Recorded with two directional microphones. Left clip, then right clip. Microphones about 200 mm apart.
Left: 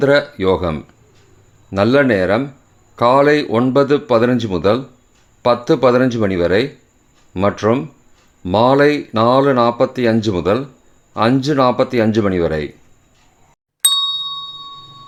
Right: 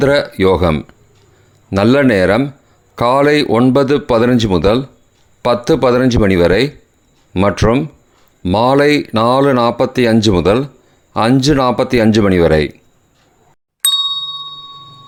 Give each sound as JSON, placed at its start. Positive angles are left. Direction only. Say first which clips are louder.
{"t": 0.0, "sound": "speech", "louder": "right 2 dB", "side_deg": -30}
{"t": 13.8, "sound": "ding", "louder": "right 1 dB", "side_deg": 0}